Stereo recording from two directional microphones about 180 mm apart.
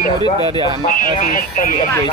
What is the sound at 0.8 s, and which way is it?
Speech, 50° left (ahead or behind).